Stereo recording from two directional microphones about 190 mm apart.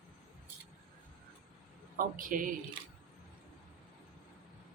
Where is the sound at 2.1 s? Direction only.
45° right (ahead or behind).